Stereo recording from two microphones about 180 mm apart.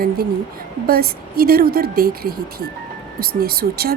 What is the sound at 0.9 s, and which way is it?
A woman's voice, 55° right (ahead or behind).